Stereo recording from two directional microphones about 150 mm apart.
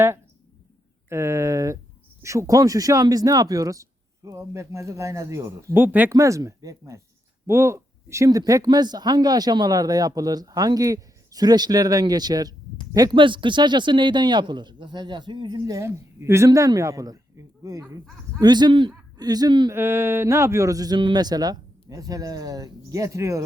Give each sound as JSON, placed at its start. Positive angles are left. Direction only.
{"t": 1.1, "sound": "speech", "side_deg": -20}
{"t": 19.7, "sound": "speech", "side_deg": -15}